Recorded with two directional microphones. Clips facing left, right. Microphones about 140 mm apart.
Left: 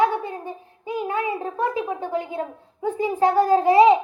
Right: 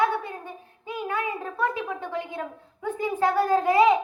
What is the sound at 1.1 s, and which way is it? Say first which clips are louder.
A child's voice: left 2 dB; 30° left (ahead or behind).